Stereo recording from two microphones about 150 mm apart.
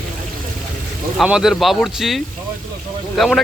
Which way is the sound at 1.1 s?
5° right (ahead or behind).